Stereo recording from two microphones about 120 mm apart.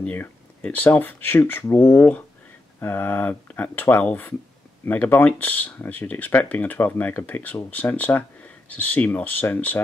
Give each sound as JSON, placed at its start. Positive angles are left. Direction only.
{"t": 0.0, "sound": "speech", "side_deg": 10}